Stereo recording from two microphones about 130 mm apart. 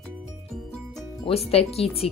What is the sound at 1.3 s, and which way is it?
Speech, 50° left (ahead or behind).